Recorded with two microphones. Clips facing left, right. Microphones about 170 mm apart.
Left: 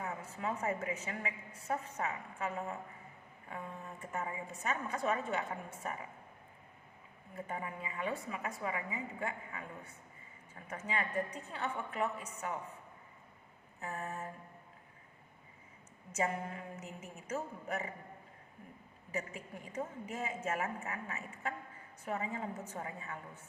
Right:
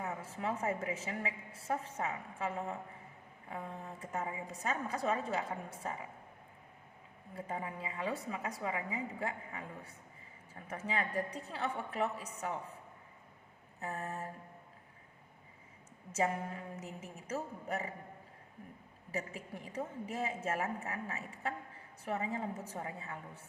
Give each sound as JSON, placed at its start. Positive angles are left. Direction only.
{"t": 0.0, "sound": "a woman's voice", "side_deg": -30}
{"t": 7.3, "sound": "a woman's voice", "side_deg": -30}
{"t": 13.8, "sound": "a woman's voice", "side_deg": -35}
{"t": 16.1, "sound": "a woman's voice", "side_deg": -30}
{"t": 19.1, "sound": "a woman's voice", "side_deg": -35}